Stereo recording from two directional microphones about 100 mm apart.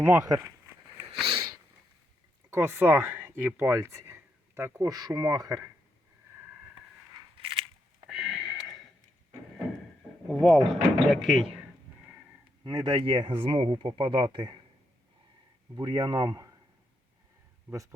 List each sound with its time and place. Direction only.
0.0 s speech: 20° right (ahead or behind)
0.3 s speech: 35° right (ahead or behind)
1.3 s sniff: 55° right (ahead or behind)
2.5 s speech: 25° right (ahead or behind)
4.9 s speech: 40° right (ahead or behind)
8.1 s a sound: centre (ahead or behind)
10.2 s speech: 5° left (ahead or behind)
12.6 s speech: 45° right (ahead or behind)
13.2 s speech: 60° right (ahead or behind)
15.7 s speech: 40° right (ahead or behind)